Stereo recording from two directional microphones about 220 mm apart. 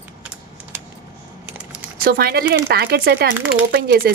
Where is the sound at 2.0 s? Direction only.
45° right (ahead or behind).